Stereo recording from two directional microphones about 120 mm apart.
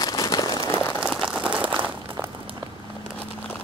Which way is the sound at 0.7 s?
25° left (ahead or behind).